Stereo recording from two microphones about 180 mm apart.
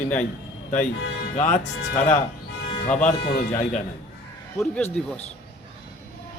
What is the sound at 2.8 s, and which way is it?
Speech, 45° left (ahead or behind).